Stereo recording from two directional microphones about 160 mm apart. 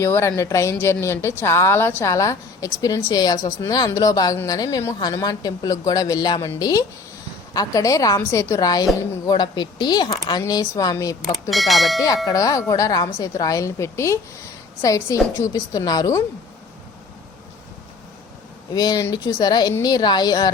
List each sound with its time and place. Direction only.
0.0 s a woman's voice: 15° left (ahead or behind)
11.5 s speech: centre (ahead or behind)
12.0 s a woman's voice: 20° left (ahead or behind)
18.7 s a woman's voice: 25° left (ahead or behind)